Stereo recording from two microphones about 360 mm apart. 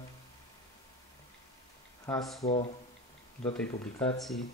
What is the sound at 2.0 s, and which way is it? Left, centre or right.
Speech, centre.